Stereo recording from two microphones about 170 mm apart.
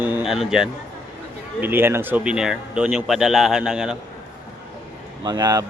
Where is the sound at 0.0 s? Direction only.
10° right (ahead or behind).